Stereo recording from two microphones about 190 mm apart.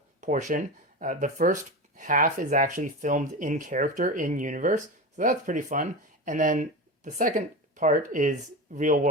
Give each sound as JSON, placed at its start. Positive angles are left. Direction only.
{"t": 0.2, "sound": "speech", "side_deg": -40}